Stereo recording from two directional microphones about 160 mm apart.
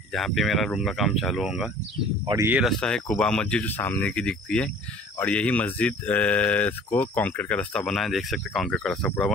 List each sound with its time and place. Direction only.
0.1 s speech: centre (ahead or behind)
2.2 s speech: 20° right (ahead or behind)
2.8 s speech: 5° left (ahead or behind)